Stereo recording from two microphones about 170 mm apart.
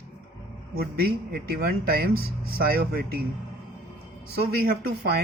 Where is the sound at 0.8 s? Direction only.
65° right (ahead or behind).